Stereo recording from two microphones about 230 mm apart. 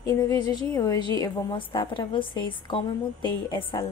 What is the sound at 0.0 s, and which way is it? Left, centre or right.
A woman's voice, centre.